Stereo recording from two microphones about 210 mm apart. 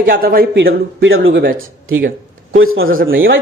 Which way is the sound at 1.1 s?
70° right (ahead or behind).